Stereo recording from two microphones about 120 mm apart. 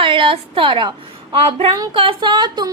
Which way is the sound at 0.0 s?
45° right (ahead or behind).